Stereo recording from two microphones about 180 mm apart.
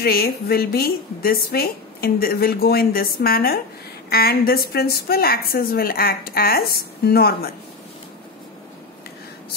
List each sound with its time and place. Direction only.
0.0 s a woman's voice: 60° left (ahead or behind)